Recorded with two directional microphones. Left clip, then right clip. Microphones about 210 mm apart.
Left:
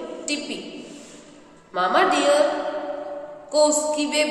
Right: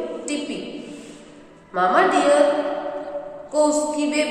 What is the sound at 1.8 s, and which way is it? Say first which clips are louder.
Speech: right 2 dB; 20° left (ahead or behind).